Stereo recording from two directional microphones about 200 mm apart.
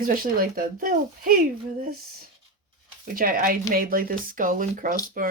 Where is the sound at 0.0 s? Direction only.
45° right (ahead or behind).